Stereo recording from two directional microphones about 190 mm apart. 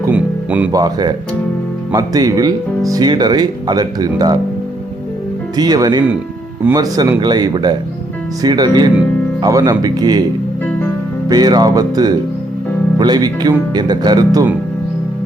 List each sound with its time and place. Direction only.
0.0 s music: 10° right (ahead or behind)
0.7 s speech: 20° right (ahead or behind)
5.5 s speech: 20° right (ahead or behind)
11.3 s speech: 20° right (ahead or behind)